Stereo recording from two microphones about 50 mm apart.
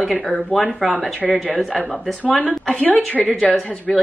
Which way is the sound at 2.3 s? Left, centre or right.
Centre.